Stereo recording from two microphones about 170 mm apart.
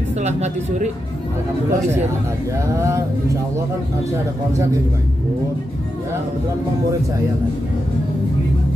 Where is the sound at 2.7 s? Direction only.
15° right (ahead or behind).